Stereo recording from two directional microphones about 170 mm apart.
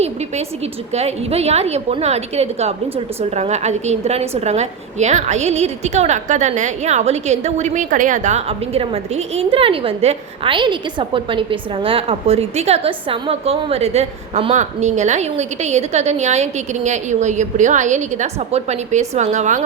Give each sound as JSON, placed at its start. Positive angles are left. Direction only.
{"t": 0.9, "sound": "a woman's voice", "side_deg": -40}